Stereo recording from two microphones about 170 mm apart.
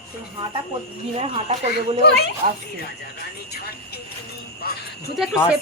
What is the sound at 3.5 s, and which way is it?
Speech, 70° left (ahead or behind).